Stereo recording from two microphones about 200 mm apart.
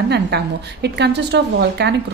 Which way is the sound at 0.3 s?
55° right (ahead or behind).